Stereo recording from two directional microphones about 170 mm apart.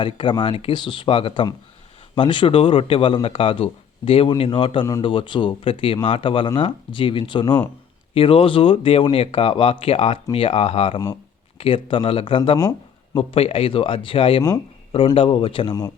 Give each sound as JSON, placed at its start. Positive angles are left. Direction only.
{"t": 0.0, "sound": "speech", "side_deg": 30}
{"t": 13.1, "sound": "speech", "side_deg": 35}